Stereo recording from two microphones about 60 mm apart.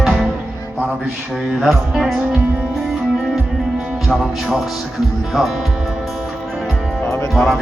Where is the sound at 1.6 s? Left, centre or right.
Centre.